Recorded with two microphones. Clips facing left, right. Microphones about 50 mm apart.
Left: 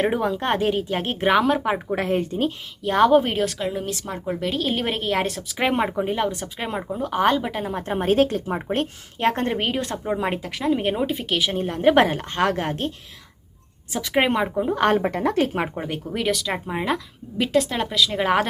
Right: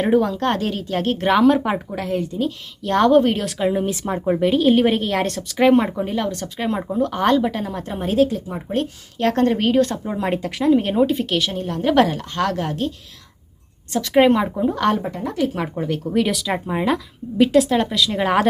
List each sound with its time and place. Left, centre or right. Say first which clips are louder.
0.0 s speech: right 4 dB; centre
1.9 s a woman's voice: left 1 dB; left
2.8 s speech: right 2 dB; centre
3.6 s speech: right 6 dB; centre
4.6 s speech: right 8 dB; centre; by 7.9 s left
7.9 s a woman's voice: right 1 dB; left
9.1 s speech: right 4 dB; left; by 10.8 s centre
10.8 s speech: right 6 dB; centre
11.5 s a woman's voice: left 1 dB; left
13.9 s speech: right 6 dB; centre
14.9 s speech: left 3 dB; left
15.5 s a woman's voice: right 2 dB; left
16.1 s speech: right 3 dB; centre